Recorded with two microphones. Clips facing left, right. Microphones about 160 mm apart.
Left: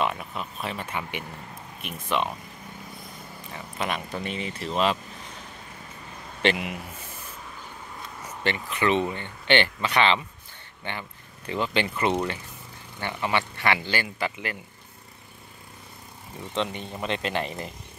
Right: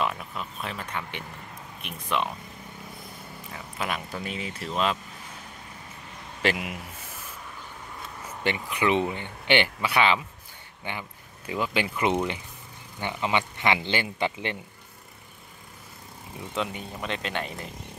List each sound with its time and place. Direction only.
0.0 s speech: 5° left (ahead or behind)
3.5 s speech: centre (ahead or behind)
6.4 s speech: centre (ahead or behind)
8.5 s speech: 15° right (ahead or behind)
16.5 s speech: 5° right (ahead or behind)